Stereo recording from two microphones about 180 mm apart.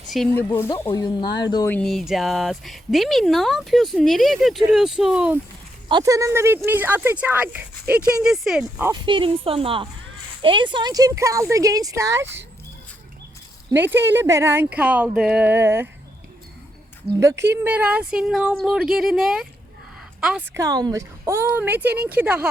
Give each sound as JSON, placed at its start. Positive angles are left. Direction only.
{"t": 0.3, "sound": "speech", "side_deg": 10}
{"t": 0.7, "sound": "speech", "side_deg": 20}
{"t": 1.7, "sound": "speech", "side_deg": 0}
{"t": 5.9, "sound": "speech", "side_deg": -20}
{"t": 8.9, "sound": "speech", "side_deg": -30}
{"t": 13.7, "sound": "speech", "side_deg": -10}
{"t": 17.2, "sound": "speech", "side_deg": -15}
{"t": 20.6, "sound": "speech", "side_deg": -20}